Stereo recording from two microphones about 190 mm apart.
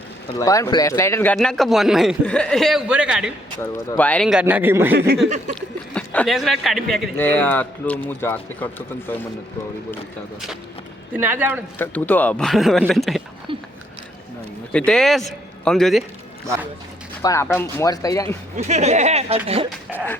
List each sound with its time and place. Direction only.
0.3 s speech: 15° left (ahead or behind); by 3.3 s 5° right (ahead or behind)
3.6 s speech: 10° left (ahead or behind); by 4.9 s 10° right (ahead or behind)
5.5 s a man's voice: 5° left (ahead or behind)
11.1 s speech: 10° right (ahead or behind)
11.8 s a man's voice: 10° left (ahead or behind)
13.5 s a sound: 25° right (ahead or behind)
14.7 s speech: 5° left (ahead or behind)
17.2 s a man's voice: 15° left (ahead or behind)
18.5 s speech: 35° right (ahead or behind)